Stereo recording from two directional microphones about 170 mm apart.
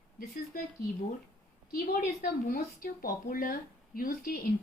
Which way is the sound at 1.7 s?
55° left (ahead or behind).